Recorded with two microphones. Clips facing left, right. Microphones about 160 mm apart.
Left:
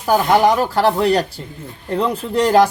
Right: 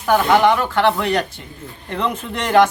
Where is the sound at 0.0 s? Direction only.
35° left (ahead or behind).